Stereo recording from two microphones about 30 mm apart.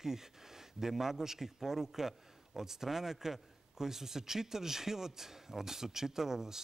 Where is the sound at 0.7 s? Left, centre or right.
Centre.